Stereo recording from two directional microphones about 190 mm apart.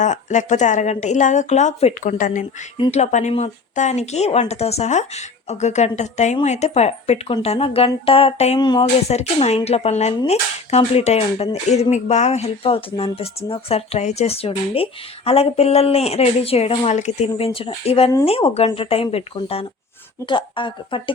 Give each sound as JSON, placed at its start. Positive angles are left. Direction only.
{"t": 0.0, "sound": "speech", "side_deg": 40}
{"t": 2.7, "sound": "a woman's voice", "side_deg": 30}
{"t": 9.0, "sound": "a woman's voice", "side_deg": 35}